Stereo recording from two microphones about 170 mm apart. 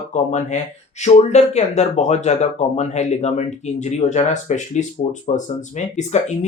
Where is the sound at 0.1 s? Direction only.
45° left (ahead or behind).